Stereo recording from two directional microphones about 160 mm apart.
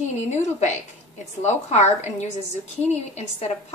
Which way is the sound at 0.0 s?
45° left (ahead or behind).